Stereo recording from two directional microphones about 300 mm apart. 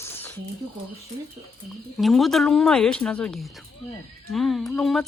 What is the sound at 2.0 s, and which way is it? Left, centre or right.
Speech, centre.